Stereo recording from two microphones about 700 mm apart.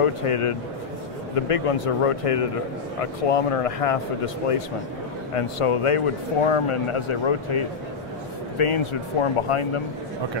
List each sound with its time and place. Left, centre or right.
0.0 s speech: left
5.3 s speech: left